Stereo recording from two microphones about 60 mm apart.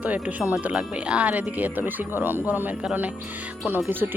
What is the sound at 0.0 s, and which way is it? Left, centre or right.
Speech, right.